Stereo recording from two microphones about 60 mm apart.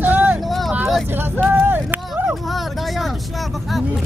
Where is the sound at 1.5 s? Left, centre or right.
Right.